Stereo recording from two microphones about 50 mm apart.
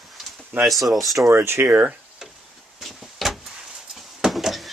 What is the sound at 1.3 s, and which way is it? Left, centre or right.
Speech, right.